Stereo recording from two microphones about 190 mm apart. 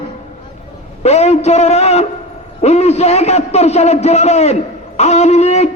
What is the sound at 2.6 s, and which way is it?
A man's voice, 35° left (ahead or behind).